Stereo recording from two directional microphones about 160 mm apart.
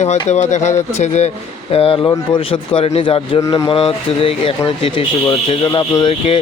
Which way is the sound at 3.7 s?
35° left (ahead or behind).